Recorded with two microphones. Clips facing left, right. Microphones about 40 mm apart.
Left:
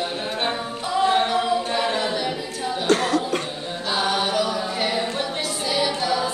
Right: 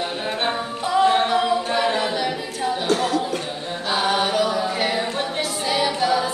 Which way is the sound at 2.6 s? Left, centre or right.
Right.